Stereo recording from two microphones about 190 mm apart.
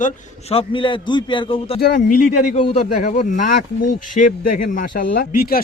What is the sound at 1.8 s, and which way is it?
Speech, 45° left (ahead or behind).